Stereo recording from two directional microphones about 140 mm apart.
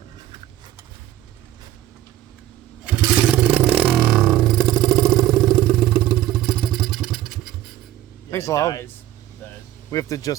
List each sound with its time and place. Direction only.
2.8 s vehicle: 5° right (ahead or behind)
8.3 s speech: 20° left (ahead or behind)
9.9 s speech: 25° left (ahead or behind)